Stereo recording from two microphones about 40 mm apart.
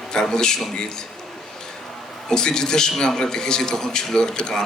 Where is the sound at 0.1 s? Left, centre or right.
Centre.